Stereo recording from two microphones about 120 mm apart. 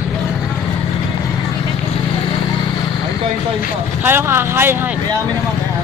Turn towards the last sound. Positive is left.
turn(degrees=-20)  # may be behind; listen again after turning